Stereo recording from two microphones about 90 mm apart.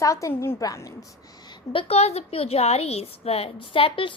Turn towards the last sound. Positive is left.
turn(degrees=80)